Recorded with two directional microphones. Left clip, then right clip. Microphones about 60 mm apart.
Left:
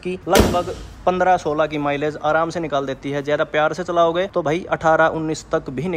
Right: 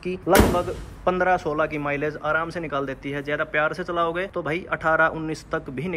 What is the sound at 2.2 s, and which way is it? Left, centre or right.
Speech, left.